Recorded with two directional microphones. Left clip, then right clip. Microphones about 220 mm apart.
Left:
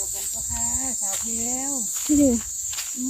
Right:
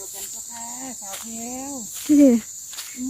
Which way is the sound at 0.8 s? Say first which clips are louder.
Left 6 dB; centre (ahead or behind).